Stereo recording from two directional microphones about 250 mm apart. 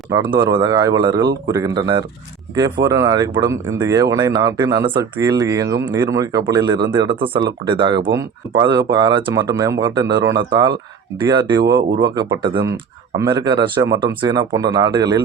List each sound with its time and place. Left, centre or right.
0.1 s speech: centre